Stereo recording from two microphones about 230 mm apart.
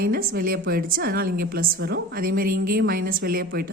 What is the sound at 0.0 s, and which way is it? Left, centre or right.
A woman's voice, right.